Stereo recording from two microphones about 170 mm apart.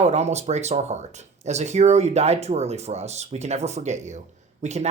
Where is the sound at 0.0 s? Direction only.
40° right (ahead or behind).